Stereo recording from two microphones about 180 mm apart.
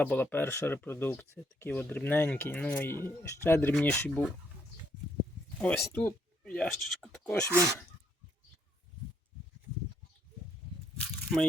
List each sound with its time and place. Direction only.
0.0 s speech: 10° left (ahead or behind)
5.5 s speech: 10° left (ahead or behind)
7.5 s speech: 15° right (ahead or behind)